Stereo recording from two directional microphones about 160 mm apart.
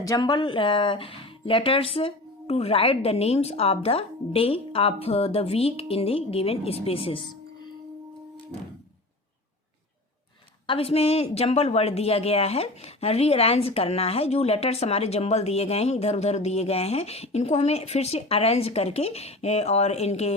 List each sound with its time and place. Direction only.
0.0 s a woman's voice: 25° left (ahead or behind)
10.7 s a woman's voice: 35° left (ahead or behind)